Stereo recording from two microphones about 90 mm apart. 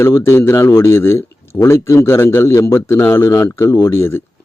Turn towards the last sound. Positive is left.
turn(degrees=25)  # may be behind; listen again after turning